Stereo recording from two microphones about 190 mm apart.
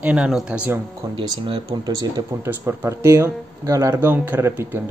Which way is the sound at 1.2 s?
25° right (ahead or behind).